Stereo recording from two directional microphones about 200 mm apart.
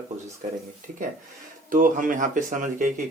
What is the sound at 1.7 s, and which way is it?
Speech, 40° right (ahead or behind).